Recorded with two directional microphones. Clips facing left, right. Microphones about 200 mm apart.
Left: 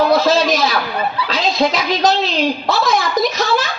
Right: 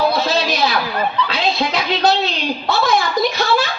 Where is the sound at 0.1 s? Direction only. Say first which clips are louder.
Left 5 dB; 45° left (ahead or behind).